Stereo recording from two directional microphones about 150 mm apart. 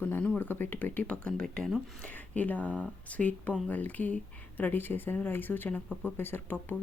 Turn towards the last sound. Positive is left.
turn(degrees=15)  # may be behind; listen again after turning